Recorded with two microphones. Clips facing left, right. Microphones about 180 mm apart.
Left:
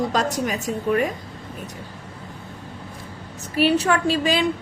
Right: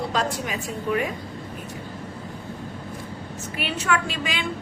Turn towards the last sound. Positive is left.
turn(degrees=35)  # may be behind; listen again after turning